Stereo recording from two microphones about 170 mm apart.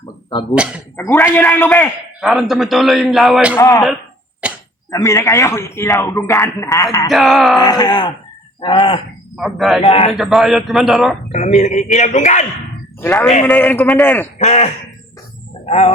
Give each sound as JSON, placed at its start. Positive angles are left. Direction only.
{"t": 0.5, "sound": "speech", "side_deg": -5}
{"t": 0.9, "sound": "speech", "side_deg": 10}
{"t": 2.2, "sound": "a man's voice", "side_deg": 0}
{"t": 3.5, "sound": "speech", "side_deg": 15}
{"t": 4.4, "sound": "a sound", "side_deg": -5}
{"t": 4.9, "sound": "speech", "side_deg": 20}
{"t": 7.1, "sound": "a man's voice", "side_deg": 0}
{"t": 7.6, "sound": "speech", "side_deg": 25}
{"t": 9.4, "sound": "a man's voice", "side_deg": 0}
{"t": 9.8, "sound": "speech", "side_deg": 35}
{"t": 10.1, "sound": "a man's voice", "side_deg": 0}
{"t": 11.3, "sound": "a man's voice", "side_deg": 40}
{"t": 13.0, "sound": "speech", "side_deg": 15}
{"t": 14.3, "sound": "a man's voice", "side_deg": 40}